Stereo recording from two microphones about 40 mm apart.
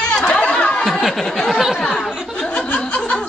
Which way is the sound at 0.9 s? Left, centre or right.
Centre.